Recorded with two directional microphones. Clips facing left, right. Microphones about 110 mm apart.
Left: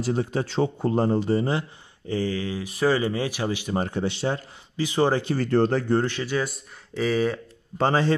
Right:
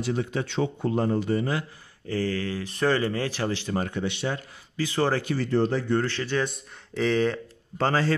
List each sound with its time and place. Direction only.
0.0 s a man's voice: 35° left (ahead or behind); by 3.7 s 15° left (ahead or behind)
3.7 s speech: 30° left (ahead or behind)
4.7 s a man's voice: 15° left (ahead or behind)
5.4 s speech: 60° left (ahead or behind)
6.0 s a man's voice: 10° left (ahead or behind)